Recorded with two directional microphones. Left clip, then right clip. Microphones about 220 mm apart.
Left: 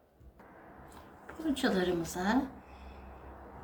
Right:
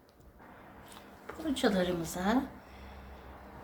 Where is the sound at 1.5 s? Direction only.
20° right (ahead or behind).